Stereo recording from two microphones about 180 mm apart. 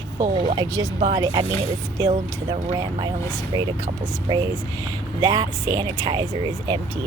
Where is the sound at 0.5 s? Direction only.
25° right (ahead or behind).